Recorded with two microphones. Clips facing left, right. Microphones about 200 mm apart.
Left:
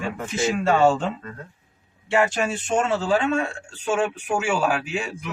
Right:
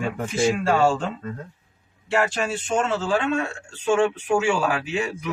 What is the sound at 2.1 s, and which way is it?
Speech, centre (ahead or behind).